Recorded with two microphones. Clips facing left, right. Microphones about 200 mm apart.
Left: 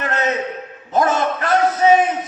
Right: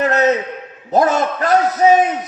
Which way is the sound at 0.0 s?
40° right (ahead or behind).